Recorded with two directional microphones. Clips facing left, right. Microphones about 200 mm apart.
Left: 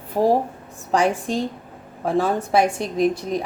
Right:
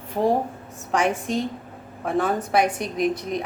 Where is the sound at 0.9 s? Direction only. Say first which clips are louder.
Left 2 dB; 35° left (ahead or behind).